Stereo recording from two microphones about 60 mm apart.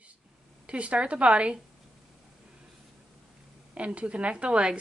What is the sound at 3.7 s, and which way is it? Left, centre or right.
Speech, right.